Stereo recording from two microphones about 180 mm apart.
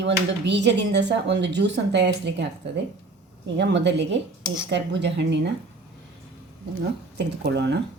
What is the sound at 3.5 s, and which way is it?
Speech, 75° right (ahead or behind).